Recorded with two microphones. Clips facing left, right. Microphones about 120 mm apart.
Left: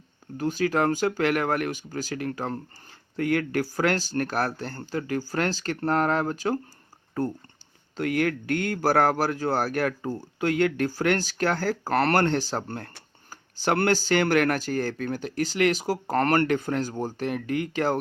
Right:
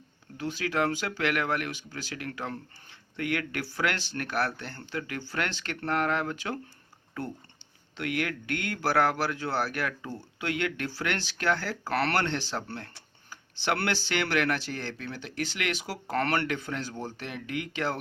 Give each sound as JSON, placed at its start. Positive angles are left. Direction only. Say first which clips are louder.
{"t": 0.3, "sound": "speech", "louder": "left 5 dB", "side_deg": 45}